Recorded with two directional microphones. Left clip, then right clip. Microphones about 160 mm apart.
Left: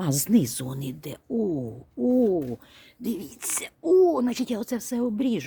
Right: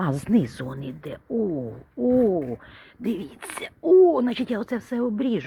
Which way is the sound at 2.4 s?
15° left (ahead or behind).